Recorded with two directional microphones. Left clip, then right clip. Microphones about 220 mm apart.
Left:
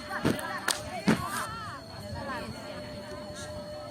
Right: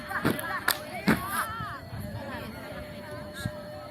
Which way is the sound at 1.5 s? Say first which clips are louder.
Right 3 dB; 55° left (ahead or behind).